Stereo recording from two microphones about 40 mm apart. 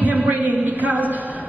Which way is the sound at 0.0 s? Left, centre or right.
Right.